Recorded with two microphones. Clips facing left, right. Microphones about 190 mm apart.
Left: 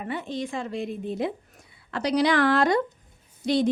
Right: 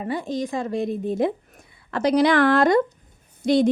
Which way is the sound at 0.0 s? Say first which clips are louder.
Right 5 dB; 35° right (ahead or behind).